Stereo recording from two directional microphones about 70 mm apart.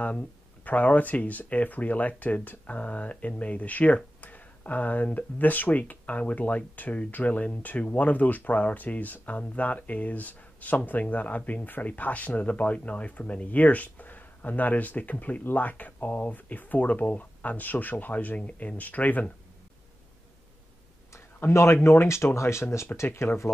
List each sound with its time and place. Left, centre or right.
0.7 s speech: left
21.1 s a sound: left
21.8 s speech: left